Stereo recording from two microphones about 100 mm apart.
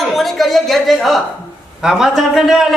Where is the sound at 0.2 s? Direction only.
Centre (ahead or behind).